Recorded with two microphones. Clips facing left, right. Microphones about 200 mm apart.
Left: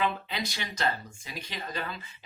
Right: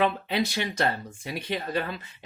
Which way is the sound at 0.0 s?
60° right (ahead or behind).